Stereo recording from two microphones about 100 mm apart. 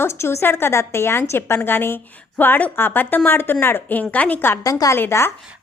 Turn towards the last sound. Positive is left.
turn(degrees=25)  # may be behind; listen again after turning